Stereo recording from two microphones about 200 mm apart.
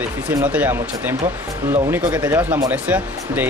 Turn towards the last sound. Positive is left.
turn(degrees=-10)  # may be behind; listen again after turning